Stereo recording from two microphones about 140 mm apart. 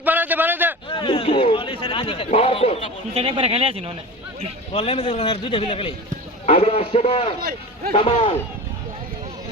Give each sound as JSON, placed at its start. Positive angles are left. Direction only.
{"t": 0.0, "sound": "a sound", "side_deg": -10}
{"t": 0.9, "sound": "a man's voice", "side_deg": 40}
{"t": 3.2, "sound": "speech", "side_deg": -45}
{"t": 4.7, "sound": "a man's voice", "side_deg": 50}